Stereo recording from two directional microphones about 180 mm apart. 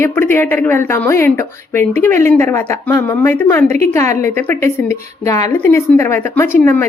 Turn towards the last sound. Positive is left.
turn(degrees=10)  # may be behind; listen again after turning